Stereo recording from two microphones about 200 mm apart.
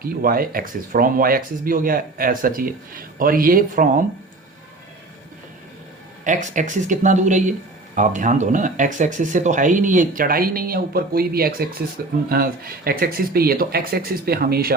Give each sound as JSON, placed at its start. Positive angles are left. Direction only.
{"t": 0.0, "sound": "speech", "side_deg": -45}
{"t": 6.2, "sound": "speech", "side_deg": -40}